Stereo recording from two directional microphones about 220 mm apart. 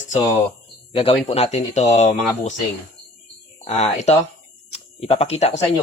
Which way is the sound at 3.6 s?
30° left (ahead or behind).